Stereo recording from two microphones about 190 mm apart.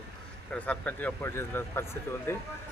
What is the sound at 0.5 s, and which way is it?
Speech, 5° left (ahead or behind).